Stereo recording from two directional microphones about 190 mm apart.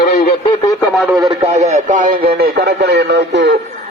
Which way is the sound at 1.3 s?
30° right (ahead or behind).